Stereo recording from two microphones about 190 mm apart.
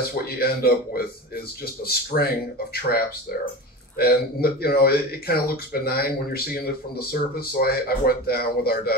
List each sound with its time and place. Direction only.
0.0 s speech: 55° left (ahead or behind)